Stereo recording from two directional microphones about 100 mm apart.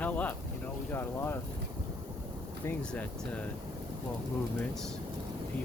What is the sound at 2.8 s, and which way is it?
Speech, 10° left (ahead or behind).